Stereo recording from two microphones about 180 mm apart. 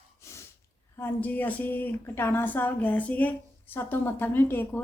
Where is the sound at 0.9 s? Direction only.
10° left (ahead or behind).